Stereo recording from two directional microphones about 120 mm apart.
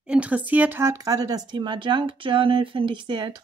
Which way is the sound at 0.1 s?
10° right (ahead or behind).